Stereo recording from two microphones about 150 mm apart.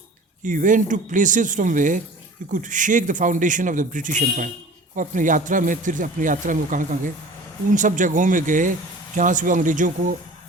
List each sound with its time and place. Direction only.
0.4 s speech: 60° right (ahead or behind)